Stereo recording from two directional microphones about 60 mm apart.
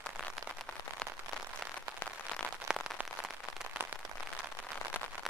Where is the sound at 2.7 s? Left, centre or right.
Centre.